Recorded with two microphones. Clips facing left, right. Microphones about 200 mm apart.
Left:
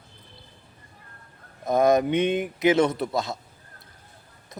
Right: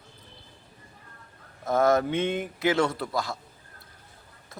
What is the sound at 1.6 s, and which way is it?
Speech, 15° left (ahead or behind).